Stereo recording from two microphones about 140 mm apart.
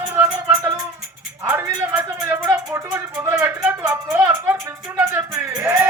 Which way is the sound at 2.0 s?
15° right (ahead or behind).